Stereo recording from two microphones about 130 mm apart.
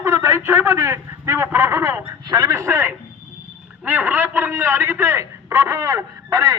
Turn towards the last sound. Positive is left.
turn(degrees=-30)  # may be behind; listen again after turning